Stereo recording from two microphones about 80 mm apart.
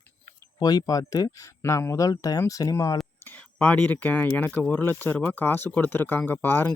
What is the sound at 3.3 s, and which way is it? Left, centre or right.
Speech, centre.